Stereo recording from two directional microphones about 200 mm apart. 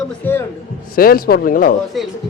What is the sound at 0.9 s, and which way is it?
Speech, 50° left (ahead or behind).